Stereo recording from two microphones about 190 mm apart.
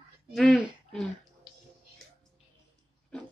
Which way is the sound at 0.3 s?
Centre (ahead or behind).